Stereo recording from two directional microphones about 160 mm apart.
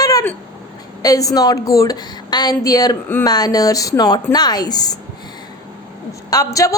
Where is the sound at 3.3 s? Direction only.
25° left (ahead or behind).